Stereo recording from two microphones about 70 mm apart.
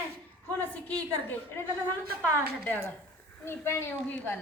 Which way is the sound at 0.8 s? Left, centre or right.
Left.